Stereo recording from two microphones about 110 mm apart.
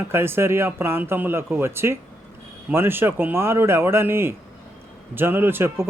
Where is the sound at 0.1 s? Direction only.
20° right (ahead or behind).